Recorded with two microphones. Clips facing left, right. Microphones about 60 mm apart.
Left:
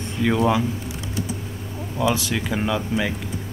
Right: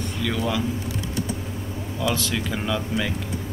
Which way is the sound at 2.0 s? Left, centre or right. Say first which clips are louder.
Left 3 dB; centre.